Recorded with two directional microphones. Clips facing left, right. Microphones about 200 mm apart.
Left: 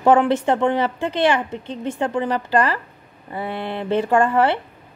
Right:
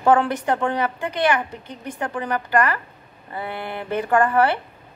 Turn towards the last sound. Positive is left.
turn(degrees=25)  # may be behind; listen again after turning